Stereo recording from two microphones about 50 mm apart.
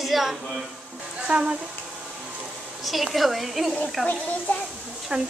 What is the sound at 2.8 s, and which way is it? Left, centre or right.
A woman's voice, centre.